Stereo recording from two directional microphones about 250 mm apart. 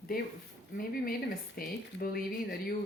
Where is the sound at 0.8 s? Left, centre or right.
Left.